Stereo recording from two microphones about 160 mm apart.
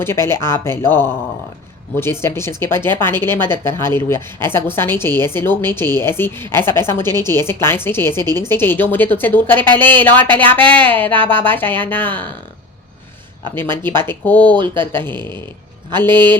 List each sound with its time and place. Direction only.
0.0 s speech: 15° left (ahead or behind)
13.6 s speech: 15° left (ahead or behind)